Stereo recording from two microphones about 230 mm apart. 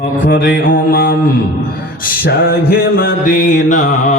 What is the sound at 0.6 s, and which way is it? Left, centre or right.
Mantra, left.